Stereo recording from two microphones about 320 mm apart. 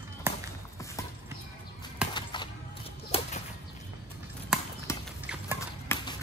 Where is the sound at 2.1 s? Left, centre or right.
Centre.